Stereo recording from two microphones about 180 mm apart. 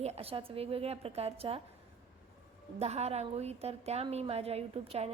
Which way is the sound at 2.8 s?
35° right (ahead or behind).